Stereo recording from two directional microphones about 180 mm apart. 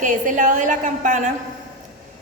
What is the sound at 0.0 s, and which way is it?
A woman's voice, 45° right (ahead or behind).